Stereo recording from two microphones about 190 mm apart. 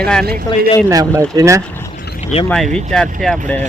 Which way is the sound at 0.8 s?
15° right (ahead or behind).